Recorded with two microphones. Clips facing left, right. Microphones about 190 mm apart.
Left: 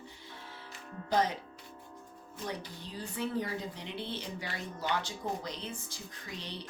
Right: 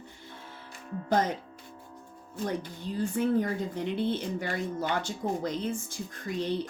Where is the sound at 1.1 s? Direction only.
50° right (ahead or behind).